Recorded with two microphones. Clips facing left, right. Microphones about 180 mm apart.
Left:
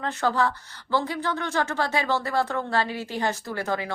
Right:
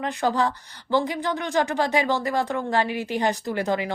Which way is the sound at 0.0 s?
15° right (ahead or behind).